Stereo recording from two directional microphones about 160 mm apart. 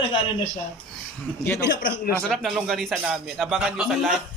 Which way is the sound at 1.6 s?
90° left.